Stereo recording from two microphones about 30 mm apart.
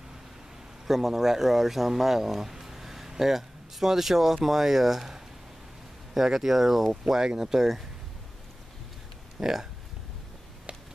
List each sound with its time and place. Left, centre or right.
0.8 s speech: centre
6.3 s speech: centre
9.4 s speech: centre